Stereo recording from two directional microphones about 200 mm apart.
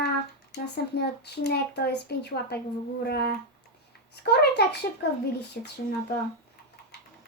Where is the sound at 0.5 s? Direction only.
55° left (ahead or behind).